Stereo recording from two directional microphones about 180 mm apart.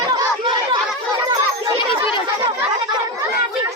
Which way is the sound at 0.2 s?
25° right (ahead or behind).